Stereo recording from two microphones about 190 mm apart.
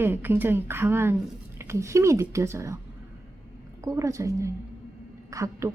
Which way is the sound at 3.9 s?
15° right (ahead or behind).